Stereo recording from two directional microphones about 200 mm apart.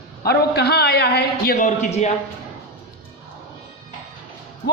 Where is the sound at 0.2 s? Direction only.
50° left (ahead or behind).